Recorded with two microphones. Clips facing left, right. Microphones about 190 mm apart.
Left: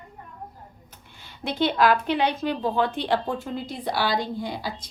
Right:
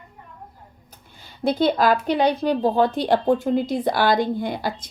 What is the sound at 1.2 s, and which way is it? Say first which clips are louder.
A woman's voice: right 5 dB; 40° right (ahead or behind).